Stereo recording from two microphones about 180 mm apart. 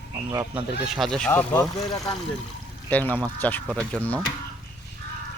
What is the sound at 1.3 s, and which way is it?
Speech, 15° left (ahead or behind).